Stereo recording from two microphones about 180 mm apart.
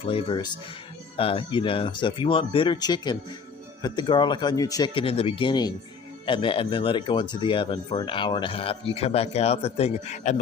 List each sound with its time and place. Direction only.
0.0 s speech: 30° left (ahead or behind)